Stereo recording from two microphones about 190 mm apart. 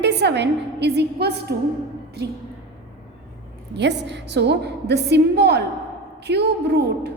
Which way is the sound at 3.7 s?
65° right (ahead or behind).